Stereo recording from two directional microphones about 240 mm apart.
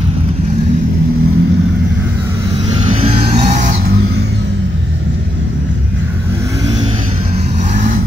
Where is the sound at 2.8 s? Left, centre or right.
Right.